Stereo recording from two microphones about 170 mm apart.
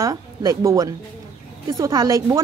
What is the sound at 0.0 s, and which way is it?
Speech, 20° right (ahead or behind).